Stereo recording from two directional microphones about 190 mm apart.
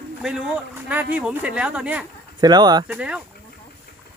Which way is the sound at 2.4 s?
20° right (ahead or behind).